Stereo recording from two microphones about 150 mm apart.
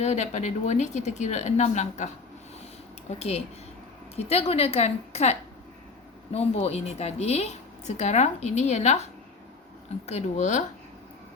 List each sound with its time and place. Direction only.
0.0 s a woman's voice: 50° left (ahead or behind)
10.1 s a woman's voice: 50° left (ahead or behind)